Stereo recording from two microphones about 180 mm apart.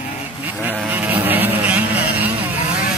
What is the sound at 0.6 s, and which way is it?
Vehicle, 10° right (ahead or behind).